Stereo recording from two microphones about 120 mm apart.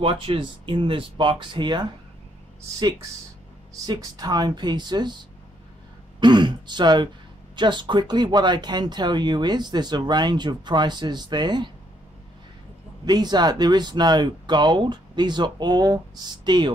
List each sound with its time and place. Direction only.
0.0 s speech: 50° right (ahead or behind)
3.8 s speech: 30° right (ahead or behind)
6.1 s throat clearing: 40° right (ahead or behind)
7.5 s speech: 40° right (ahead or behind)
13.0 s speech: 35° right (ahead or behind)